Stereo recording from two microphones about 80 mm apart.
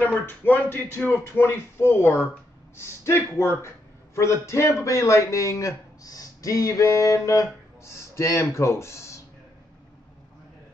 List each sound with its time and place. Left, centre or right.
0.5 s a man's voice: left